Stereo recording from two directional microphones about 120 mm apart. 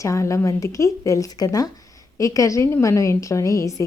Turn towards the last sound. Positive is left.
turn(degrees=25)  # may be behind; listen again after turning